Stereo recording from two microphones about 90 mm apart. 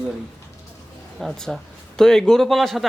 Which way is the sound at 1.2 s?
5° left (ahead or behind).